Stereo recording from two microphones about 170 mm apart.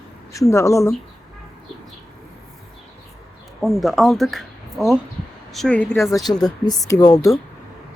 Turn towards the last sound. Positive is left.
turn(degrees=20)  # may be behind; listen again after turning